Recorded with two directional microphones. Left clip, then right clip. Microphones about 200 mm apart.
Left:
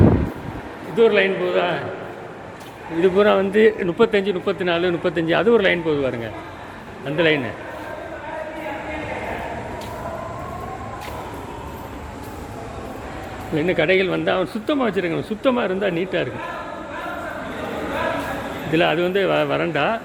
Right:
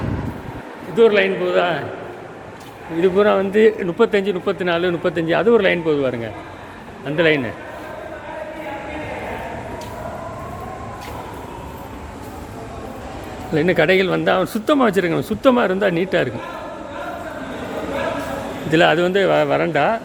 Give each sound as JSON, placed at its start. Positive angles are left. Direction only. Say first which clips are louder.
{"t": 0.9, "sound": "speech", "louder": "right 2 dB", "side_deg": -10}
{"t": 3.0, "sound": "a man's voice", "louder": "right 1 dB", "side_deg": 0}
{"t": 13.6, "sound": "speech", "louder": "right 3 dB", "side_deg": -15}
{"t": 18.7, "sound": "speech", "louder": "right 4 dB", "side_deg": -15}